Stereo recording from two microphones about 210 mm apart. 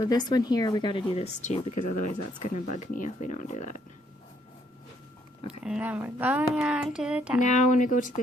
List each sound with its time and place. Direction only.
0.0 s a woman's voice: 20° left (ahead or behind)
1.1 s speech: 30° left (ahead or behind)
5.6 s speech: 5° right (ahead or behind)
7.4 s speech: 35° left (ahead or behind)